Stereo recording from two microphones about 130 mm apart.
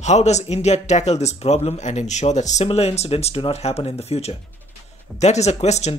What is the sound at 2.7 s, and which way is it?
Speech, 50° left (ahead or behind).